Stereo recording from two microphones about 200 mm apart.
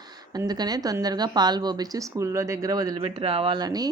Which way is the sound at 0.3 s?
20° right (ahead or behind).